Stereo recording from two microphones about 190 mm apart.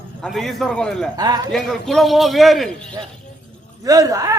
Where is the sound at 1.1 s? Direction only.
20° right (ahead or behind).